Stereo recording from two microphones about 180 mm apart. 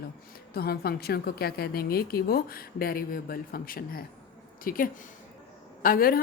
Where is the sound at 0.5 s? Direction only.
60° left (ahead or behind).